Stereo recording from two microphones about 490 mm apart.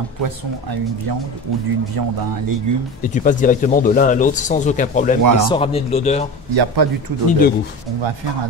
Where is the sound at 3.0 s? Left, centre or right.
Centre.